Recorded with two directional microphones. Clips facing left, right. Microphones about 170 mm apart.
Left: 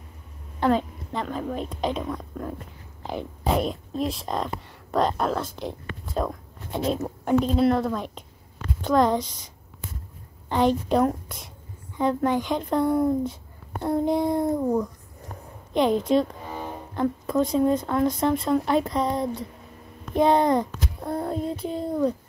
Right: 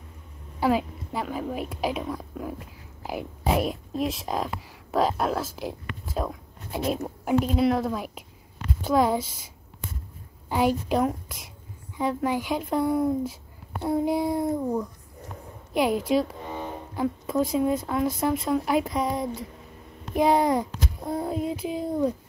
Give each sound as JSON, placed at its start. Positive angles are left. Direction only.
{"t": 0.6, "sound": "a woman's voice", "side_deg": -5}
{"t": 10.5, "sound": "speech", "side_deg": -5}
{"t": 15.7, "sound": "speech", "side_deg": -5}